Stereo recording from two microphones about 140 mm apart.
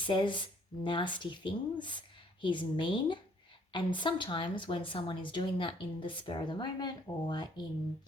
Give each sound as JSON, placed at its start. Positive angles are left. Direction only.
{"t": 0.0, "sound": "speech", "side_deg": 35}